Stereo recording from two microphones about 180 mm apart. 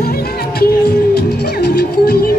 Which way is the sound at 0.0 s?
60° left (ahead or behind).